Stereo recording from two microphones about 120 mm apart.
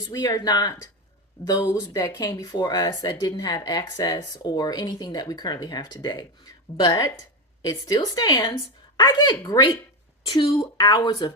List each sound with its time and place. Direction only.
0.0 s speech: 30° left (ahead or behind)